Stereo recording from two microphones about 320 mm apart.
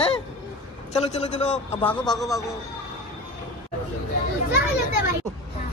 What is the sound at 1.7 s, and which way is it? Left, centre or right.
Speech, centre.